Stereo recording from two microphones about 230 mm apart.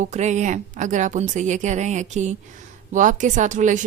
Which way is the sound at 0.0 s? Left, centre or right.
Right.